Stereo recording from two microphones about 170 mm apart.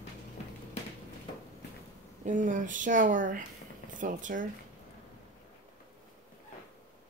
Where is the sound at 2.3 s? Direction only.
50° right (ahead or behind).